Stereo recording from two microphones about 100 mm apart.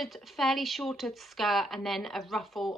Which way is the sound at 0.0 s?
Centre (ahead or behind).